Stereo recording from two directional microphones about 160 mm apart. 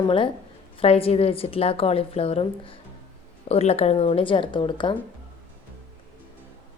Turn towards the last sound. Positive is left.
turn(degrees=30)  # may be behind; listen again after turning